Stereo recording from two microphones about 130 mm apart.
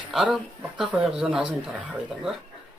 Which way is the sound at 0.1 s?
Centre (ahead or behind).